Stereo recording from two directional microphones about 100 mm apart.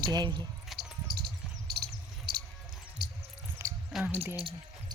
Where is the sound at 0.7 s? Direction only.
Centre (ahead or behind).